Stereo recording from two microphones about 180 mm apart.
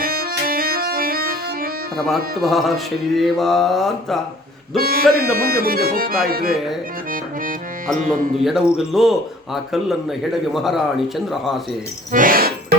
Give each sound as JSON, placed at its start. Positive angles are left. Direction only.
{"t": 0.0, "sound": "accordion", "side_deg": -55}
{"t": 2.0, "sound": "speech", "side_deg": 0}
{"t": 4.8, "sound": "speech", "side_deg": -55}
{"t": 7.9, "sound": "speech", "side_deg": -50}
{"t": 8.4, "sound": "speech", "side_deg": 0}
{"t": 12.1, "sound": "music", "side_deg": -50}